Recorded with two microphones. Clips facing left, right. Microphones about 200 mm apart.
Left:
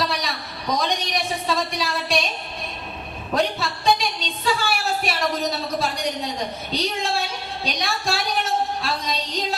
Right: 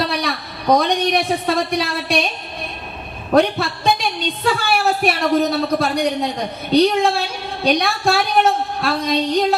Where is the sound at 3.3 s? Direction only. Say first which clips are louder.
Right 8 dB; 60° right (ahead or behind).